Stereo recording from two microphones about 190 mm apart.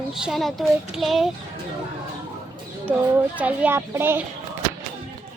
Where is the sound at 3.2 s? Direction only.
10° right (ahead or behind).